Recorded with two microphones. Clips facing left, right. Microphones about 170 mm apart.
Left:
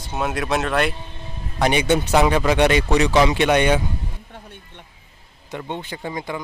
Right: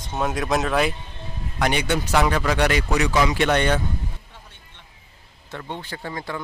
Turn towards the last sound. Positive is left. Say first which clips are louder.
# left 3 dB
turn(degrees=15)  # may be behind; listen again after turning